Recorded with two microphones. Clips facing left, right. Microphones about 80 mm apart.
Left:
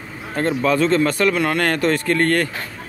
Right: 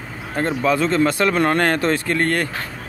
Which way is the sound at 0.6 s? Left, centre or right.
Centre.